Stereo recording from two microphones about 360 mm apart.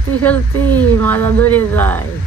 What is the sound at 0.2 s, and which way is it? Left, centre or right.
Speech, centre.